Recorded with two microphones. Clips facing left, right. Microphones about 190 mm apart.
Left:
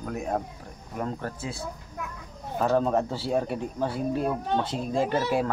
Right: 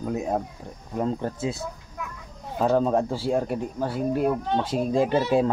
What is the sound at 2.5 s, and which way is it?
Speech, 15° right (ahead or behind).